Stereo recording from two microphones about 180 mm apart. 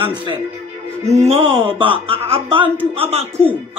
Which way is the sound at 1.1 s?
35° right (ahead or behind).